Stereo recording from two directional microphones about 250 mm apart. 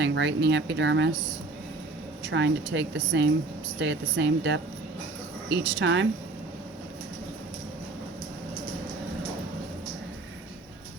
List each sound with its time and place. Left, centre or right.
0.0 s speech: right
2.2 s speech: right